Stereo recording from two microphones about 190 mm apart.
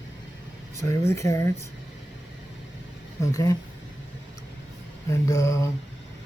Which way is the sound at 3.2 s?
15° left (ahead or behind).